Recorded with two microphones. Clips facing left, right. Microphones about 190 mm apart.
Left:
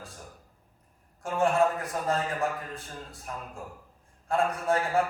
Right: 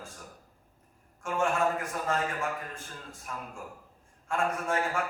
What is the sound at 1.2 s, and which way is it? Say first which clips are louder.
A man's voice: left 4 dB; 35° left (ahead or behind).